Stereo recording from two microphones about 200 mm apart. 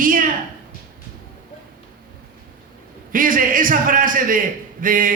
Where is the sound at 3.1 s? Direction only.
45° right (ahead or behind).